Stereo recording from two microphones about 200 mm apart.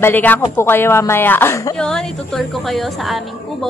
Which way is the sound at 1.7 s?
5° left (ahead or behind).